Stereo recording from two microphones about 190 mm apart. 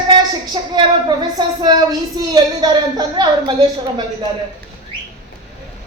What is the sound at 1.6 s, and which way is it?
A woman's voice, 20° right (ahead or behind).